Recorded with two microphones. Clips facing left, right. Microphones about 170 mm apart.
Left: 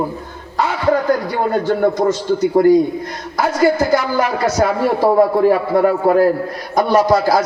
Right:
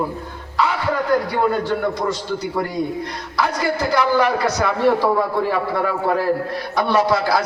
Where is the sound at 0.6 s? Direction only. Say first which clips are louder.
Left 4 dB; 45° left (ahead or behind).